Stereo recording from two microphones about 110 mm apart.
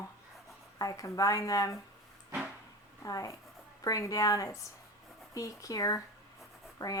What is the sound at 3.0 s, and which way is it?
Speech, 30° left (ahead or behind).